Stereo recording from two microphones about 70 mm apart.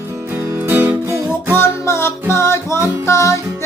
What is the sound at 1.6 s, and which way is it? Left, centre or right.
Music, left.